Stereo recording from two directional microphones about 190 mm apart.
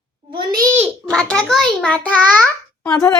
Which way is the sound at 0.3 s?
20° right (ahead or behind).